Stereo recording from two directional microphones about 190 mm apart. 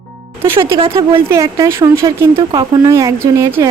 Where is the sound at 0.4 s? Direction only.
15° right (ahead or behind).